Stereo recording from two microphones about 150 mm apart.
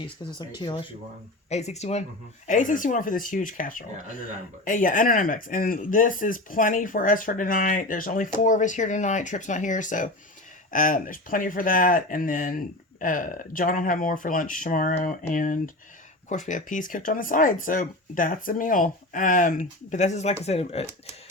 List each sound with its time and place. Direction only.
0.6 s speech: 30° left (ahead or behind)
1.5 s speech: 50° left (ahead or behind)
2.5 s speech: 60° left (ahead or behind); by 20.8 s 45° left (ahead or behind)